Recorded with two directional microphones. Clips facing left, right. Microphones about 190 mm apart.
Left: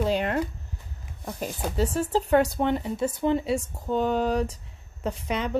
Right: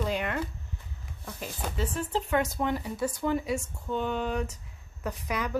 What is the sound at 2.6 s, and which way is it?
A woman's voice, 25° left (ahead or behind).